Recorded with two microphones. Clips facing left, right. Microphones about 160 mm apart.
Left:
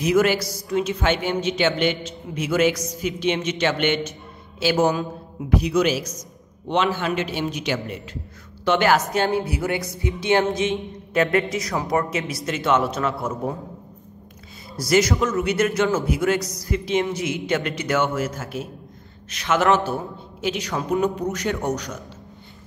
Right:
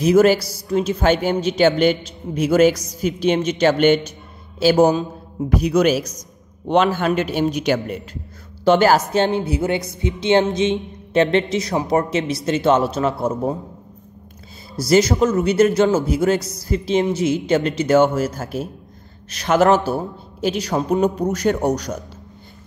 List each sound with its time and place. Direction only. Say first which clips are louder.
0.0 s a man's voice: right 5 dB; 35° right (ahead or behind)
9.1 s speech: right 3 dB; 25° right (ahead or behind)
14.8 s speech: right 4 dB; 25° right (ahead or behind)
15.1 s speech: right 6 dB; 40° right (ahead or behind)